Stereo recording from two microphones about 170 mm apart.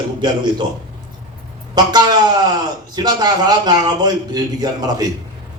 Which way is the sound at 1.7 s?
25° right (ahead or behind).